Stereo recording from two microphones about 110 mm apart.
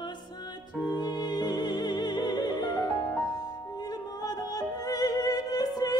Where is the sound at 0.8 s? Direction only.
40° left (ahead or behind).